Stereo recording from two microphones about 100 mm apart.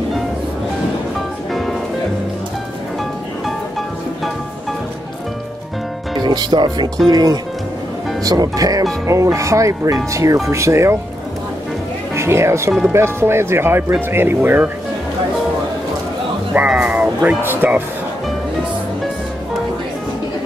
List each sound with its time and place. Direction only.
6.1 s speech: 45° right (ahead or behind); by 11.0 s 30° right (ahead or behind)
12.2 s speech: 25° right (ahead or behind)
16.5 s music: 10° right (ahead or behind)
17.4 s speech: 20° right (ahead or behind)